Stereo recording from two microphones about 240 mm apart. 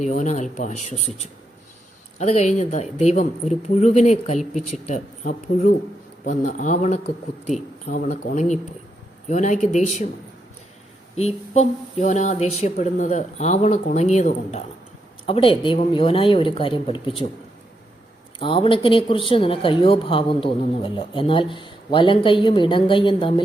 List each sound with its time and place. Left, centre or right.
0.0 s speech: left
11.2 s speech: left
18.3 s speech: left